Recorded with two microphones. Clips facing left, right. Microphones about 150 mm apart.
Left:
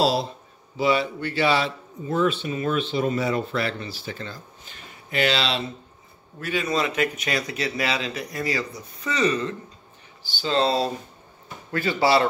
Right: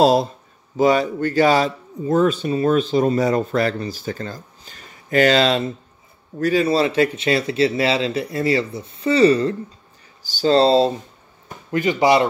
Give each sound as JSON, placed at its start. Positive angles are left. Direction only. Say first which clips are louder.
{"t": 0.0, "sound": "a man's voice", "louder": "right 7 dB", "side_deg": -45}
{"t": 6.4, "sound": "a man's voice", "louder": "right 8 dB", "side_deg": -35}